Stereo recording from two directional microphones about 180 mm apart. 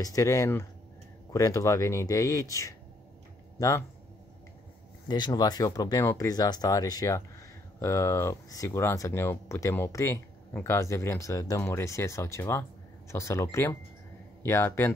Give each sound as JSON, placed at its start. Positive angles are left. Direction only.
{"t": 0.0, "sound": "speech", "side_deg": 20}
{"t": 5.0, "sound": "speech", "side_deg": 25}